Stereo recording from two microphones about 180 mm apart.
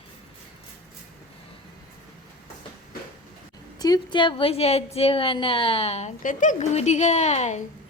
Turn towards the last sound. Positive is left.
turn(degrees=40)  # may be behind; listen again after turning